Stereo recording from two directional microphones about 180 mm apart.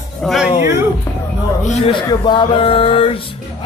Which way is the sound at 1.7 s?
35° left (ahead or behind).